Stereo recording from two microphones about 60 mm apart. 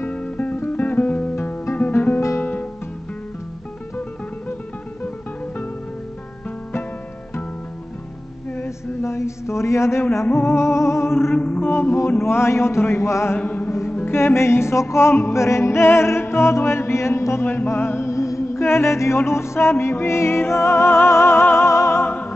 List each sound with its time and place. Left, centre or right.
0.1 s music: left
1.8 s guitar: left
2.4 s music: left
8.5 s mantra: left
10.3 s music: left
11.3 s music: left
13.4 s music: left
13.7 s music: left